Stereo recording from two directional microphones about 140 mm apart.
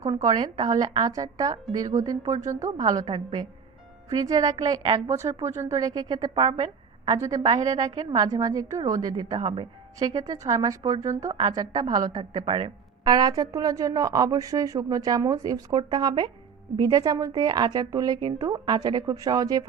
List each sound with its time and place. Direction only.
0.3 s a woman's voice: 30° right (ahead or behind)
7.1 s a woman's voice: 25° right (ahead or behind)
9.4 s a woman's voice: 45° right (ahead or behind)
10.2 s a woman's voice: 25° right (ahead or behind)